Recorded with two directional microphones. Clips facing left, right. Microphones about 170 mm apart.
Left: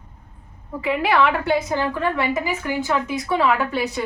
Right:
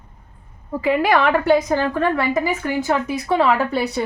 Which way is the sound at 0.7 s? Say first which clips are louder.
Right 4 dB; 40° right (ahead or behind).